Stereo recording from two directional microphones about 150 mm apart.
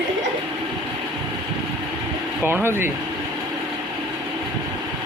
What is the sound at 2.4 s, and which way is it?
Speech, 15° right (ahead or behind).